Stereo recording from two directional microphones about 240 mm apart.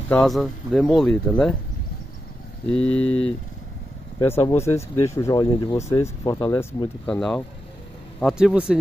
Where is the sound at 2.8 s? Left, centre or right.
Left.